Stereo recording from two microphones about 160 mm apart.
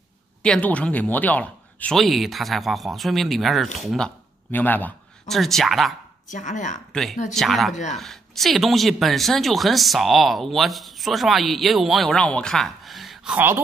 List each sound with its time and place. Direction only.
0.4 s speech: 10° left (ahead or behind)
4.5 s a man's voice: 10° left (ahead or behind)
6.3 s speech: 50° left (ahead or behind)
6.9 s speech: centre (ahead or behind)